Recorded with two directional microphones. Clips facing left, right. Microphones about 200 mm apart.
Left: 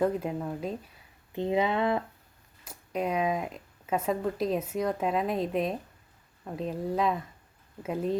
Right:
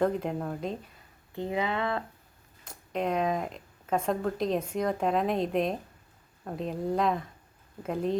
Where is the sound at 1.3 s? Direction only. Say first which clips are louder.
Left 4 dB; 20° left (ahead or behind).